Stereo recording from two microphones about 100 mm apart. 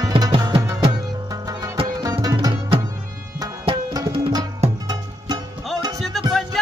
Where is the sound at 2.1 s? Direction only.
40° right (ahead or behind).